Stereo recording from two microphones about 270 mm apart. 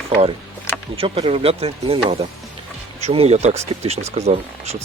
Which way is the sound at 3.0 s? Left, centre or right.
Right.